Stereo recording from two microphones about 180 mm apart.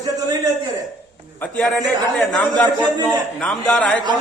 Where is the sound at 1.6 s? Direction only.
5° left (ahead or behind).